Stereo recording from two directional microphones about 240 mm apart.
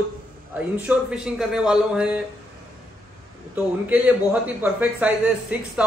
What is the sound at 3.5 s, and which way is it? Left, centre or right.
A man's voice, centre.